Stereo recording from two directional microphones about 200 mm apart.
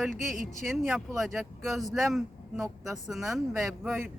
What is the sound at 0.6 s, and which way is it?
Speech, centre (ahead or behind).